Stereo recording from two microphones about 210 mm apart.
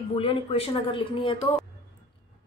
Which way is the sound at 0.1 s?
25° left (ahead or behind).